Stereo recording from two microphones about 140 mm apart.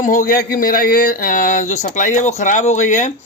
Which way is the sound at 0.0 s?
70° left (ahead or behind).